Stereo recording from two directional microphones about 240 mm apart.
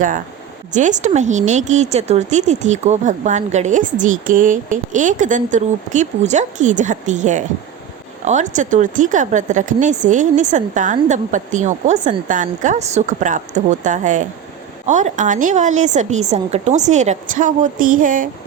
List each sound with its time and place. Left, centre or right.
0.7 s speech: right